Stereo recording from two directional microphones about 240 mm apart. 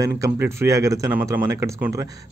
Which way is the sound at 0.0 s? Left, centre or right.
Centre.